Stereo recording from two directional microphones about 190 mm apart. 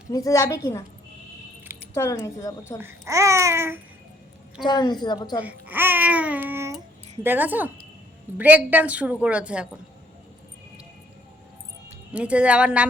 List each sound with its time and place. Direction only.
0.1 s a woman's voice: 15° left (ahead or behind)
2.0 s a woman's voice: 15° left (ahead or behind)
2.8 s speech: 15° right (ahead or behind)
4.6 s a woman's voice: 20° left (ahead or behind)
5.4 s speech: 10° right (ahead or behind)
6.7 s a sound: 10° right (ahead or behind)
8.4 s speech: 10° right (ahead or behind)
12.1 s speech: 5° right (ahead or behind)